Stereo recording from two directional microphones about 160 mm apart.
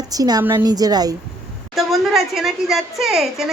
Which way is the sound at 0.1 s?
25° right (ahead or behind).